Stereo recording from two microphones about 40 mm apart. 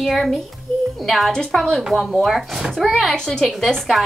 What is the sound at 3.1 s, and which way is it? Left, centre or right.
Speech, centre.